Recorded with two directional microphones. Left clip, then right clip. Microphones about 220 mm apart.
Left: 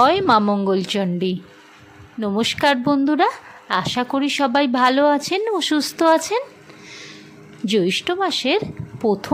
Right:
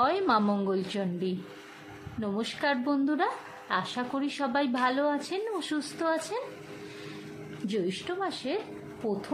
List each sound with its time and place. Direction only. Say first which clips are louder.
0.0 s a woman's voice: left 11 dB; 30° left (ahead or behind)
7.6 s a woman's voice: left 13 dB; 40° left (ahead or behind)